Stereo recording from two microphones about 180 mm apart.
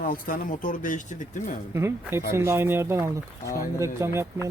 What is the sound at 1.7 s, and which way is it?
Speech, 15° right (ahead or behind).